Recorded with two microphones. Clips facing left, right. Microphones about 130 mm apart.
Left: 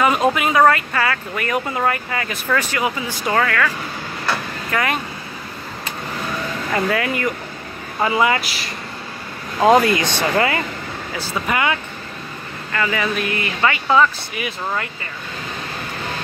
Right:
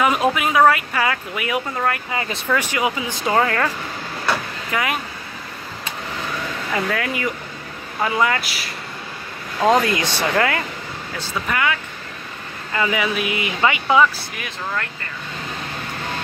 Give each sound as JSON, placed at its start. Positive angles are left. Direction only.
{"t": 0.0, "sound": "speech", "side_deg": 0}
{"t": 1.7, "sound": "speech", "side_deg": 10}
{"t": 2.4, "sound": "speech", "side_deg": -10}
{"t": 4.6, "sound": "speech", "side_deg": -10}
{"t": 6.7, "sound": "speech", "side_deg": 0}
{"t": 11.4, "sound": "speech", "side_deg": 25}
{"t": 12.7, "sound": "speech", "side_deg": -15}
{"t": 14.3, "sound": "speech", "side_deg": 5}